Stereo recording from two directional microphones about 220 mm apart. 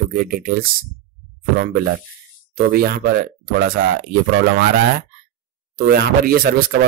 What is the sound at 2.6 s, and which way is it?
Speech, 45° right (ahead or behind).